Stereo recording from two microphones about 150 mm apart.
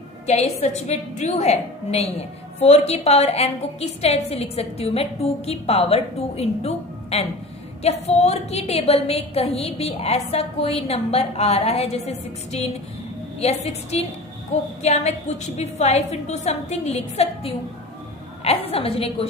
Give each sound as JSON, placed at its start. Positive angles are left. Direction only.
{"t": 0.3, "sound": "a woman's voice", "side_deg": 45}